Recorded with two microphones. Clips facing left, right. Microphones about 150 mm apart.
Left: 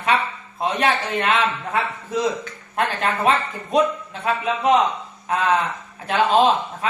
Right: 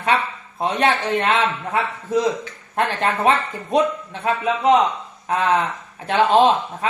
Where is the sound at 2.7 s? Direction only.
20° right (ahead or behind).